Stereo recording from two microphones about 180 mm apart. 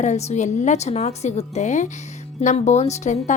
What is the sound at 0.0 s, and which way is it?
A woman's voice, 40° left (ahead or behind).